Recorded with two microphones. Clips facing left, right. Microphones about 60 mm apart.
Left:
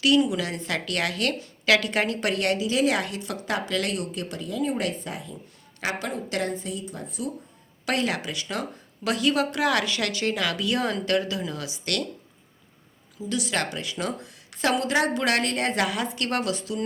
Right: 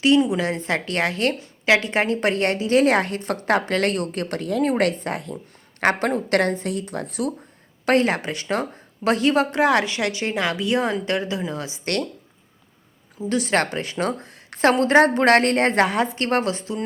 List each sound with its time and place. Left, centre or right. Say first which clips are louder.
0.0 s a woman's voice: right 4 dB; right
7.9 s a woman's voice: right 7 dB; right
13.1 s a woman's voice: right 6 dB; right